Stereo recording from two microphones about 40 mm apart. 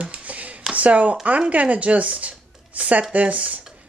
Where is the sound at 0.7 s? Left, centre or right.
Right.